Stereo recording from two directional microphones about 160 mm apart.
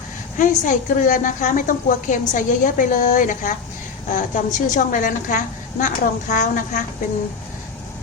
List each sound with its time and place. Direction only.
0.3 s a woman's voice: 50° left (ahead or behind)